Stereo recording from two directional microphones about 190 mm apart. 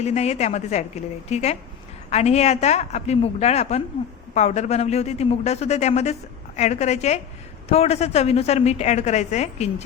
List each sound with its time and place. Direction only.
0.0 s a woman's voice: 35° left (ahead or behind)